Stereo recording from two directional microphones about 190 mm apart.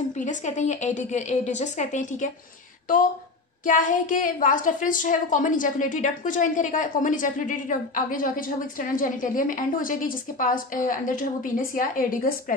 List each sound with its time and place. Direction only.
0.2 s a woman's voice: 40° left (ahead or behind)
3.6 s a woman's voice: 45° left (ahead or behind)